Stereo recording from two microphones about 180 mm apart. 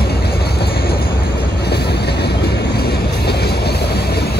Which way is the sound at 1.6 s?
65° left (ahead or behind).